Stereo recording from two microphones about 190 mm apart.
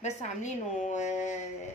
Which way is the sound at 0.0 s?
40° left (ahead or behind).